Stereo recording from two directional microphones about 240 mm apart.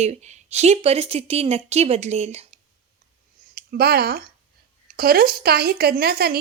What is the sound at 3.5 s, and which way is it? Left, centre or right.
Speech, right.